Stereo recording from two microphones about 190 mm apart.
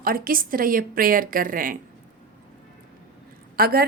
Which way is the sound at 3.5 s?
55° right (ahead or behind).